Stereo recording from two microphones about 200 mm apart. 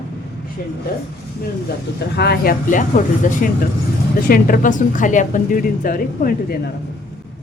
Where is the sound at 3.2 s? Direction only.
40° left (ahead or behind).